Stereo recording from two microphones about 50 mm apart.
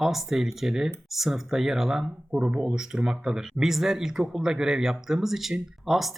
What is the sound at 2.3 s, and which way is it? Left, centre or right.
Speech, centre.